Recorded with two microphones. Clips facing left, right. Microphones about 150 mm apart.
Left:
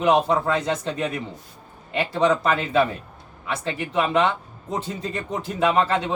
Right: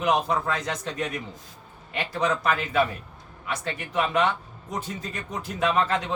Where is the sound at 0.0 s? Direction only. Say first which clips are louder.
Left 5 dB; 30° left (ahead or behind).